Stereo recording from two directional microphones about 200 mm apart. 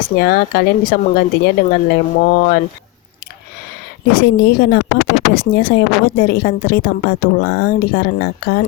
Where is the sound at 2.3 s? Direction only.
50° left (ahead or behind).